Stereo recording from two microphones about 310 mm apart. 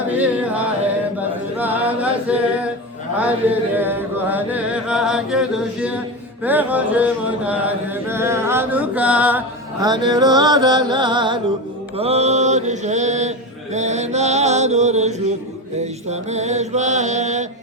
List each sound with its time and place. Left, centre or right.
0.2 s music: centre
1.5 s chant: centre
3.2 s chant: centre
9.8 s mantra: centre